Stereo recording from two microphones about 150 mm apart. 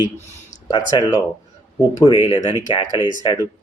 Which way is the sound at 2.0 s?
35° left (ahead or behind).